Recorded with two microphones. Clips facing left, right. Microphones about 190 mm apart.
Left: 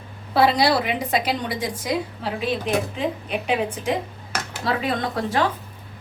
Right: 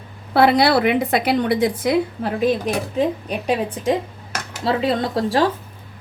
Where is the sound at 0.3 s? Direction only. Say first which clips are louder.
Right 4 dB; 60° right (ahead or behind).